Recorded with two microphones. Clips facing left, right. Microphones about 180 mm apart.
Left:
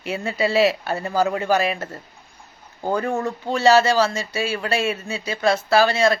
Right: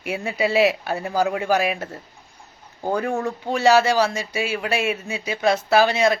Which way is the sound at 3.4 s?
15° right (ahead or behind).